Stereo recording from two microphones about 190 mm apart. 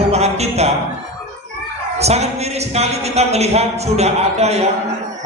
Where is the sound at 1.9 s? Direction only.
35° right (ahead or behind).